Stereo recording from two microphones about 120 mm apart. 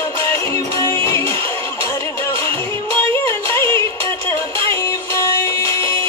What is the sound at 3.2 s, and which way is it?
Music, 20° left (ahead or behind).